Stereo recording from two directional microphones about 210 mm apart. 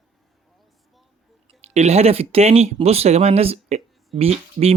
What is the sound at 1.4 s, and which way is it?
Speech, 30° right (ahead or behind).